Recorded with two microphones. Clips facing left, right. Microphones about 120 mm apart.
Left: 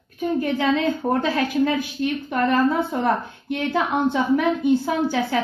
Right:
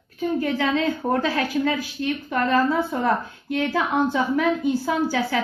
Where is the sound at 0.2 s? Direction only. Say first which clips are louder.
Left 1 dB; 25° left (ahead or behind).